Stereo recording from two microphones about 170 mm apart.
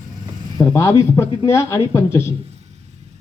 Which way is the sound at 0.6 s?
15° left (ahead or behind).